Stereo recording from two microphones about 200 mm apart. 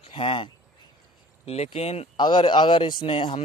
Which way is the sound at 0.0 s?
25° left (ahead or behind).